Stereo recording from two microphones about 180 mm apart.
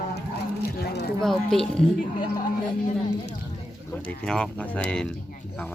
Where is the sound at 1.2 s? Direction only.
Centre (ahead or behind).